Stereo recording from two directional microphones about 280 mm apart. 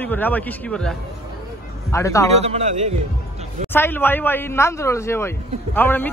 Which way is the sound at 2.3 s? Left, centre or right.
Right.